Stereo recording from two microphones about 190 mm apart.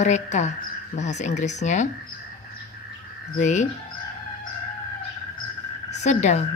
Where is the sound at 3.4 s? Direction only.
40° left (ahead or behind).